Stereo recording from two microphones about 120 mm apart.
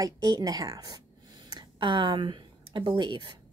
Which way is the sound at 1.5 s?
45° right (ahead or behind).